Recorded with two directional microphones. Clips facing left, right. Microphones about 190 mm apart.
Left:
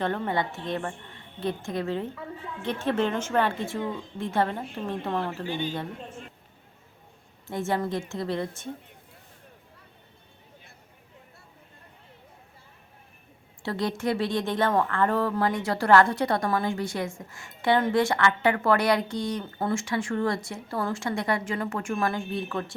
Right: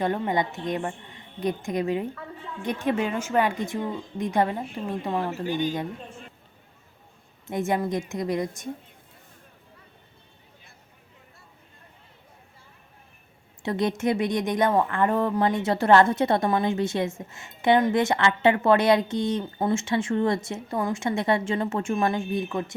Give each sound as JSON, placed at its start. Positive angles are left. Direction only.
{"t": 0.0, "sound": "speech", "side_deg": -15}
{"t": 7.4, "sound": "speech", "side_deg": -20}
{"t": 13.6, "sound": "speech", "side_deg": -20}